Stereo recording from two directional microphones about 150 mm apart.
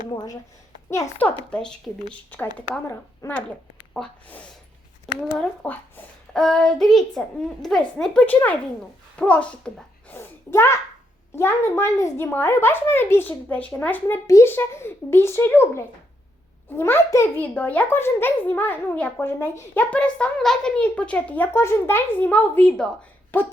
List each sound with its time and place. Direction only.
0.9 s a child's voice: 20° left (ahead or behind)
1.5 s a child's voice: 5° left (ahead or behind)